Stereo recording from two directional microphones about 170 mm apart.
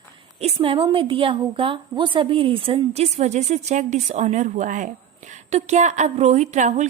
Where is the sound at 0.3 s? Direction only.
35° right (ahead or behind).